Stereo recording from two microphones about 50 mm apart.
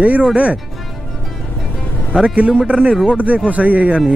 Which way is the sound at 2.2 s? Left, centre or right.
Right.